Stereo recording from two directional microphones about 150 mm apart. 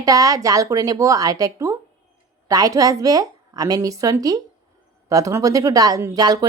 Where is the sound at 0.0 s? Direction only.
25° right (ahead or behind).